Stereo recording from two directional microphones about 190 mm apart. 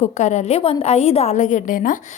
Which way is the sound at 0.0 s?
35° left (ahead or behind).